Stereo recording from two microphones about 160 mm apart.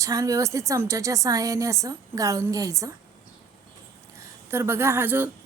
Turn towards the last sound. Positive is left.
turn(degrees=-15)  # may be behind; listen again after turning